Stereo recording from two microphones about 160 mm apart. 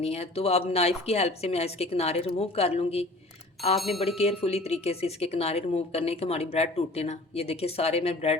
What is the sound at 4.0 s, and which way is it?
Speech, 40° left (ahead or behind).